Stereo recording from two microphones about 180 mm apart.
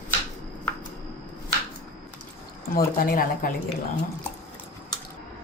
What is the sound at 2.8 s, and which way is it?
Speech, 55° left (ahead or behind).